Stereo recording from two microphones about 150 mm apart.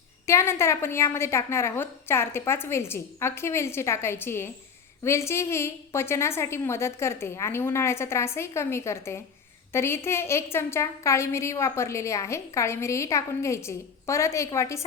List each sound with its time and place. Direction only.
0.3 s a woman's voice: 20° left (ahead or behind)